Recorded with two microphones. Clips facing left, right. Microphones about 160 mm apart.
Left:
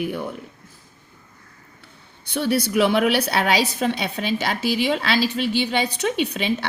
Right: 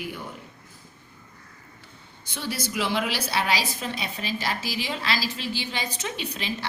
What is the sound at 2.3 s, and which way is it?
A woman's voice, 60° left (ahead or behind).